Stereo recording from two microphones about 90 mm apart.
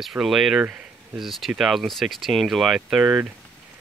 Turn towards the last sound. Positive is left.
turn(degrees=-5)  # may be behind; listen again after turning